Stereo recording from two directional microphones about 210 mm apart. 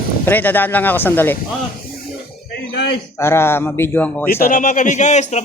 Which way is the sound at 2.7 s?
55° left (ahead or behind).